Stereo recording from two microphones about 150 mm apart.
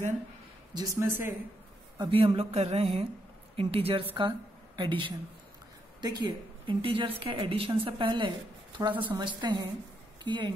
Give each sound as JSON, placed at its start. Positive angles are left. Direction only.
{"t": 0.7, "sound": "speech", "side_deg": -15}
{"t": 2.0, "sound": "a woman's voice", "side_deg": -35}